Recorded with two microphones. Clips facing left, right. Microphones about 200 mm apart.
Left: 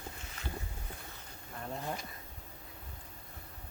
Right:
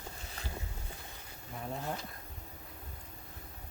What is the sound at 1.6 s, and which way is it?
Bee, 5° right (ahead or behind).